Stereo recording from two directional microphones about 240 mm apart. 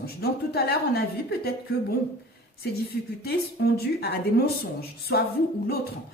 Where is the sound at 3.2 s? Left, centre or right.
Left.